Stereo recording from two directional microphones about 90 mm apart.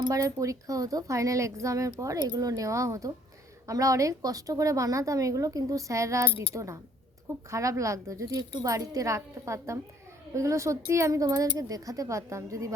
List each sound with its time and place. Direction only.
0.0 s a woman's voice: 40° right (ahead or behind)